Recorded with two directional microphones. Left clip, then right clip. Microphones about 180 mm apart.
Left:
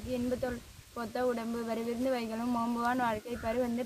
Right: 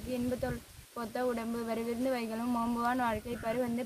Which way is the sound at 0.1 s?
5° right (ahead or behind).